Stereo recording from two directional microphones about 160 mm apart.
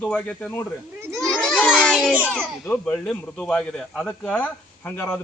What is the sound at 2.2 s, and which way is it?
Speech, 5° left (ahead or behind).